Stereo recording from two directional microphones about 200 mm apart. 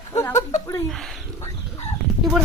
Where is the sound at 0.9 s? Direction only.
Centre (ahead or behind).